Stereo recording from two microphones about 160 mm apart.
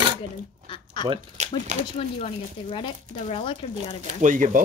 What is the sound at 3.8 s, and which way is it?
Speech, 50° right (ahead or behind).